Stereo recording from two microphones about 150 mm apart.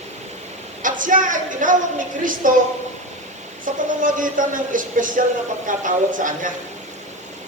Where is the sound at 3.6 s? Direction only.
65° right (ahead or behind).